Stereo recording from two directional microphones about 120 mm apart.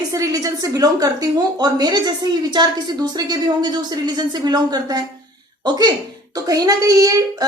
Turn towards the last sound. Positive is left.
turn(degrees=-30)  # may be behind; listen again after turning